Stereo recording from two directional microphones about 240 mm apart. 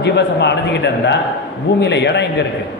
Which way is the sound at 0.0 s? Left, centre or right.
Left.